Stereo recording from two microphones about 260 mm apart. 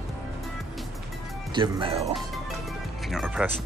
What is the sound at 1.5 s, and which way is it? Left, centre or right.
Speech, centre.